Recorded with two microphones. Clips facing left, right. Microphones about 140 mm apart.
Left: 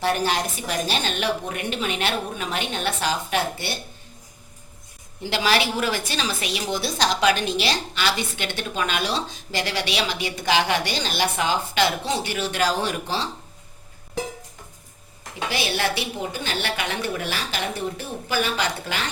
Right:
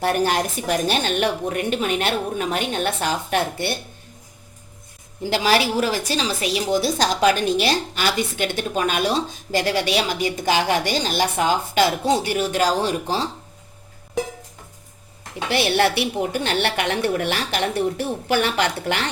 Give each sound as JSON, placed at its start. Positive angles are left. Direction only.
{"t": 0.0, "sound": "a woman's voice", "side_deg": -50}
{"t": 5.2, "sound": "a woman's voice", "side_deg": -40}
{"t": 15.4, "sound": "a woman's voice", "side_deg": -60}